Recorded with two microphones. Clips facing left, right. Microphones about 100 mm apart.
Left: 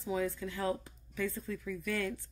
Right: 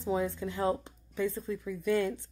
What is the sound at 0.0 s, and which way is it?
Speech, 25° right (ahead or behind).